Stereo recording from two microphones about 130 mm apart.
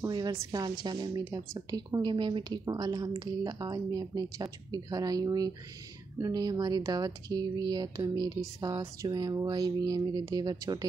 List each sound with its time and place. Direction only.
0.1 s a woman's voice: 30° right (ahead or behind)